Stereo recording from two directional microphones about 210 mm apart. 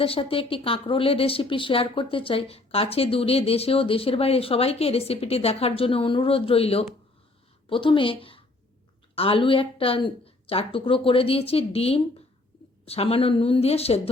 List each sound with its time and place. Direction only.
0.0 s a woman's voice: 25° left (ahead or behind)